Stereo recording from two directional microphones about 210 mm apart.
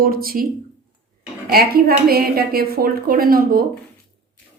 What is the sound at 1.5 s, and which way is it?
A woman's voice, 45° right (ahead or behind).